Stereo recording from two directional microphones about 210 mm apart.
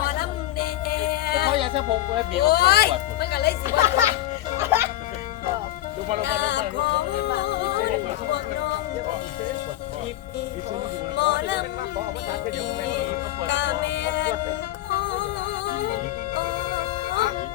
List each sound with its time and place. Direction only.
0.1 s music: 45° left (ahead or behind)
1.5 s speech: 25° right (ahead or behind)
2.4 s speech: 50° left (ahead or behind)
3.8 s speech: 15° right (ahead or behind)
4.5 s music: 10° right (ahead or behind)
6.2 s music: 55° left (ahead or behind)
11.2 s music: 55° left (ahead or behind)
13.5 s music: 55° left (ahead or behind)